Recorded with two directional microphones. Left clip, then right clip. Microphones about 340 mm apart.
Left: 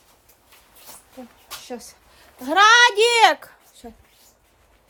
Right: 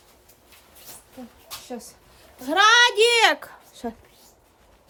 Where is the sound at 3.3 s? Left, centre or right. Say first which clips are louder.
Right 2 dB; centre.